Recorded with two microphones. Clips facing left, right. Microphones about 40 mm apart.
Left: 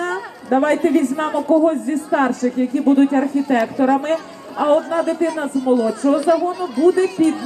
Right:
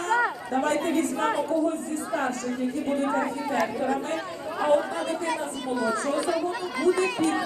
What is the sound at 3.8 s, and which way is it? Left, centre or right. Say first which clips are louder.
A man's voice: left 10 dB; left.